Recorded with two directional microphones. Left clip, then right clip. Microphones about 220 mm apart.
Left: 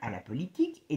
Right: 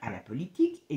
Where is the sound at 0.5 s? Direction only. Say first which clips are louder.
Right 3 dB; 40° left (ahead or behind).